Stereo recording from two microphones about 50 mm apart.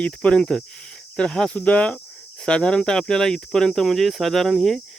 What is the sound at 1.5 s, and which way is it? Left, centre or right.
Speech, left.